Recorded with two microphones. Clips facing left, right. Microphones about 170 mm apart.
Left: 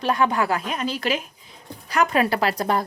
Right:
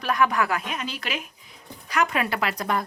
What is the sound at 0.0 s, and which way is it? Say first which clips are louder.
A woman's voice: left 2 dB; 30° left (ahead or behind).